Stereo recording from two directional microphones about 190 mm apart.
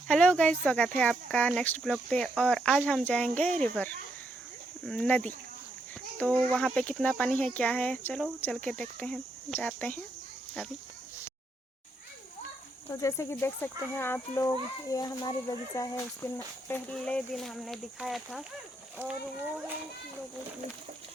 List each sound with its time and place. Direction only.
0.1 s speech: 5° left (ahead or behind)
12.9 s speech: 15° left (ahead or behind)
16.6 s speech: 5° left (ahead or behind)